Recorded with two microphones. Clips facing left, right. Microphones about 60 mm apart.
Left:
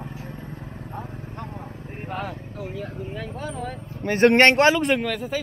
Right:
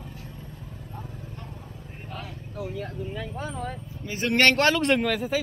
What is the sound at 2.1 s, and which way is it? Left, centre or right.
Vehicle, left.